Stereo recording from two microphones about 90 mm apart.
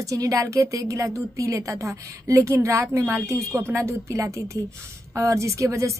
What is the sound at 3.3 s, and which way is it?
A woman's voice, 30° right (ahead or behind).